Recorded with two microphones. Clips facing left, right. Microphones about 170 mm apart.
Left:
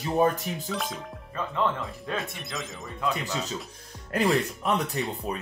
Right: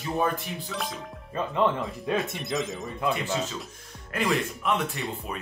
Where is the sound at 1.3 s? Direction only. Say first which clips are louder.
Right 3 dB; 20° right (ahead or behind).